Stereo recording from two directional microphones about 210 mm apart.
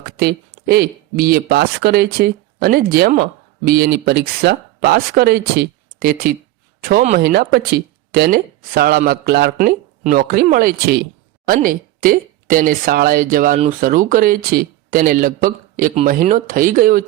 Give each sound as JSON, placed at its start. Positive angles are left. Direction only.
{"t": 0.2, "sound": "a woman's voice", "side_deg": -50}